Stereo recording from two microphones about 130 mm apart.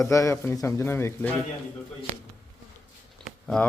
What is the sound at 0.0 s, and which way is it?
Speech, 25° left (ahead or behind).